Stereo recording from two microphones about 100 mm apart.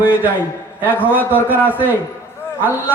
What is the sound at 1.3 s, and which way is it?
Speech, 20° right (ahead or behind).